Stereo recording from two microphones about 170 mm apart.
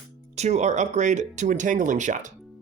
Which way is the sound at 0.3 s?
40° right (ahead or behind).